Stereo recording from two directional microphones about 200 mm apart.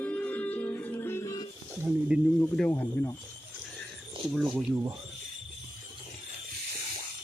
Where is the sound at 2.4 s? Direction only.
10° left (ahead or behind).